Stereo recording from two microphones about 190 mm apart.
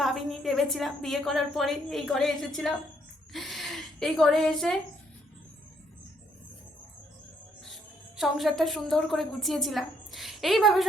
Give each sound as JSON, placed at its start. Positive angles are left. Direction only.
{"t": 0.0, "sound": "a woman's voice", "side_deg": 0}
{"t": 8.2, "sound": "a woman's voice", "side_deg": 0}